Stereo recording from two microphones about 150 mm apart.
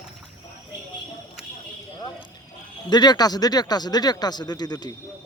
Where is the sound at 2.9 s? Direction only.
30° left (ahead or behind).